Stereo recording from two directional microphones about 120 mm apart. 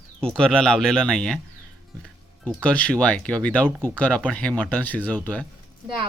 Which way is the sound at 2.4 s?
10° left (ahead or behind).